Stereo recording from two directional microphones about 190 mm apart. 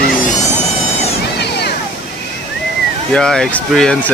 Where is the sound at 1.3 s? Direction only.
60° left (ahead or behind).